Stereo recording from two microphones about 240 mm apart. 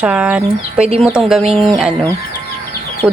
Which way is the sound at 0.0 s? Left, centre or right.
Centre.